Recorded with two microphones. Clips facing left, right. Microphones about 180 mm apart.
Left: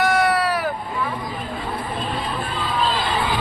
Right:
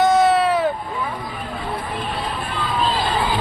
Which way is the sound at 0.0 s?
25° right (ahead or behind).